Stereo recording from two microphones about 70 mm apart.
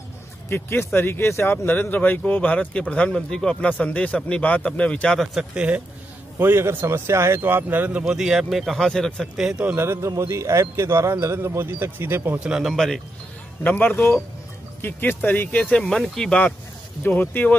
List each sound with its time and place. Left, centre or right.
0.5 s speech: left; by 5.2 s centre
5.4 s speech: centre
6.3 s speech: right
8.0 s speech: centre
9.4 s speech: centre
9.8 s speech: right
12.6 s speech: centre
13.7 s speech: left; by 16.3 s centre
17.0 s speech: left